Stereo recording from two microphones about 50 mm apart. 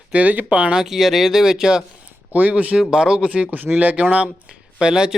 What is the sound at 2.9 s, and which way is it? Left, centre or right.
Speech, centre.